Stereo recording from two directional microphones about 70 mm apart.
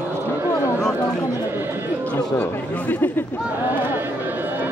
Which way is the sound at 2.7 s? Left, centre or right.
Left.